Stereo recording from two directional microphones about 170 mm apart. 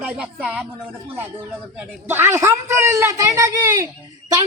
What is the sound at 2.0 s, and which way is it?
A man's voice, 15° right (ahead or behind).